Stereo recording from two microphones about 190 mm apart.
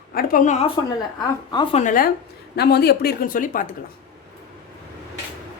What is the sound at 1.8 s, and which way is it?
Speech, 45° left (ahead or behind).